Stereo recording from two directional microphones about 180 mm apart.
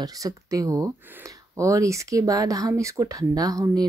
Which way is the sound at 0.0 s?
20° right (ahead or behind).